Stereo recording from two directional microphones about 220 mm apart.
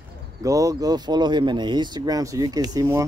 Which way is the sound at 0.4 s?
15° right (ahead or behind).